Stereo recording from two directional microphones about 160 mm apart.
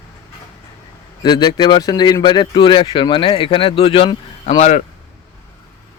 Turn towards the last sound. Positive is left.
turn(degrees=45)  # may be behind; listen again after turning